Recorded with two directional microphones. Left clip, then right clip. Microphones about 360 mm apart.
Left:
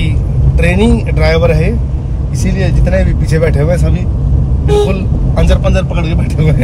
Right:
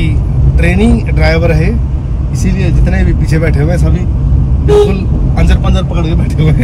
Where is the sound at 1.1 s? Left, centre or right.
Centre.